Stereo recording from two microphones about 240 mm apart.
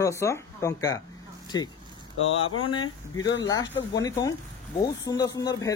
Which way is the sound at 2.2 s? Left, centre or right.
Left.